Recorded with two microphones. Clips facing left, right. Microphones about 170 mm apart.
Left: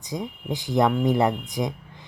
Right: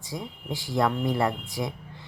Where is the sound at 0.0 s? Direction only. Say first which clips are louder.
Left 5 dB; 20° left (ahead or behind).